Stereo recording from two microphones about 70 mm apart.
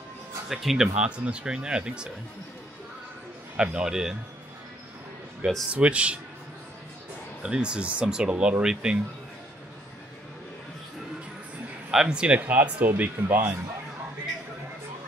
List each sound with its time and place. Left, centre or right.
0.5 s speech: centre
3.5 s speech: centre
5.7 s speech: centre
7.4 s speech: centre
11.9 s speech: centre; by 13.6 s right